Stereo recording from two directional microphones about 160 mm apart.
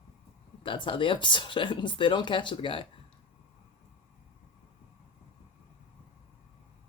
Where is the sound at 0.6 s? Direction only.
30° left (ahead or behind).